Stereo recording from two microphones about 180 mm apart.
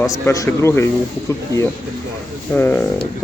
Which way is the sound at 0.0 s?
20° left (ahead or behind).